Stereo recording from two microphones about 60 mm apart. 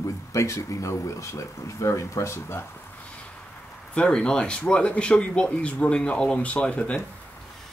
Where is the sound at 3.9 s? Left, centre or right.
Centre.